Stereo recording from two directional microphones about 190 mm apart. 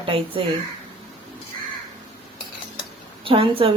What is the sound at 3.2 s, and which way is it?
Speech, 30° right (ahead or behind).